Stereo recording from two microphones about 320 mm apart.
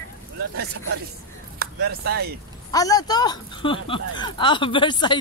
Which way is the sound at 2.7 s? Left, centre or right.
Centre.